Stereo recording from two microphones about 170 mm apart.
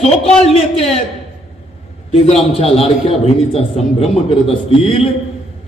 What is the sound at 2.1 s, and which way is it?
A man's voice, 40° left (ahead or behind).